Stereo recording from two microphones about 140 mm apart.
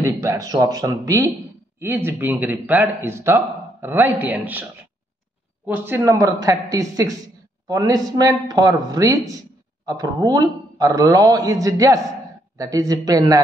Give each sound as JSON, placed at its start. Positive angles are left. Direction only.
{"t": 0.0, "sound": "a man's voice", "side_deg": -20}
{"t": 5.7, "sound": "a man's voice", "side_deg": -15}